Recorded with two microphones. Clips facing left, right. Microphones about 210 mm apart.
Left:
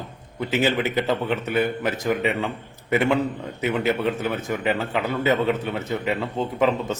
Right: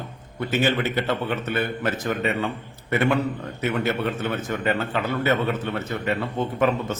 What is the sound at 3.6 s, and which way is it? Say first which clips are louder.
A man's voice: left 2 dB; 15° left (ahead or behind).